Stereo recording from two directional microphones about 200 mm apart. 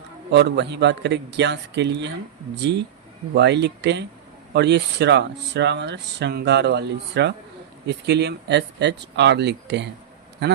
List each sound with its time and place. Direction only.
0.3 s speech: 55° right (ahead or behind)